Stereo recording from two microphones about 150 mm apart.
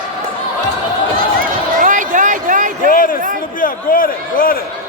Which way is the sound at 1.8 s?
60° right (ahead or behind).